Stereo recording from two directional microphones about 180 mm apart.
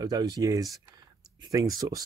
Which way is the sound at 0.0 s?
20° right (ahead or behind).